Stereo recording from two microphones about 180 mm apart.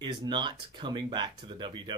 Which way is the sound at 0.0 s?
25° right (ahead or behind).